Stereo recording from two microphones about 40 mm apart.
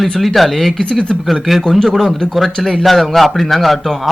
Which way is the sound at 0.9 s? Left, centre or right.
Left.